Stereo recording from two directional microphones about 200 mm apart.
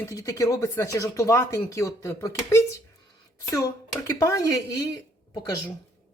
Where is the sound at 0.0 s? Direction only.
15° left (ahead or behind).